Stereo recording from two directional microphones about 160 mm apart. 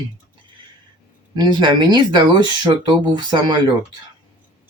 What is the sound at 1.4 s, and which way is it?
Speech, 30° right (ahead or behind).